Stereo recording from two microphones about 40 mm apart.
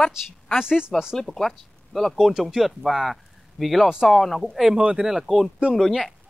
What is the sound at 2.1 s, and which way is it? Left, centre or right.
Speech, centre.